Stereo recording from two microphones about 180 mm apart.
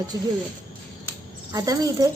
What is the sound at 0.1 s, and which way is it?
Speech, 20° right (ahead or behind).